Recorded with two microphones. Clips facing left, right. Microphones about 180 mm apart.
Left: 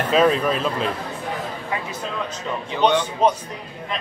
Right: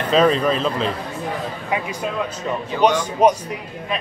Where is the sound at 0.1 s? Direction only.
5° left (ahead or behind).